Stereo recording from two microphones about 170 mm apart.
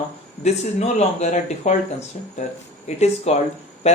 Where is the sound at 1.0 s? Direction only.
40° left (ahead or behind).